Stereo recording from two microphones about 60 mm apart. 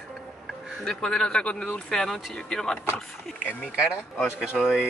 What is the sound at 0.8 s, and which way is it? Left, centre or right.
Speech, centre.